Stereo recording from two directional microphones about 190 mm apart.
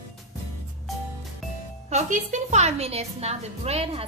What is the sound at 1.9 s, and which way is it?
A woman's voice, 40° right (ahead or behind).